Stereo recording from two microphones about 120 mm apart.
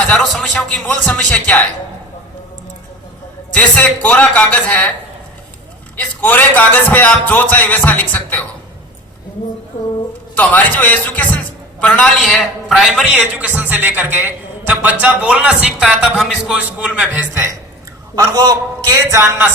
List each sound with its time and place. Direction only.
0.1 s a man's voice: 5° left (ahead or behind)
3.5 s a man's voice: 10° left (ahead or behind)
6.0 s a man's voice: 15° left (ahead or behind)
10.3 s a man's voice: 15° left (ahead or behind); by 17.5 s 15° right (ahead or behind)
18.1 s a man's voice: 30° right (ahead or behind)